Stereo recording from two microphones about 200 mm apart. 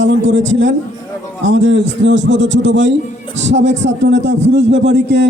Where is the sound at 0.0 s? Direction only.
65° right (ahead or behind).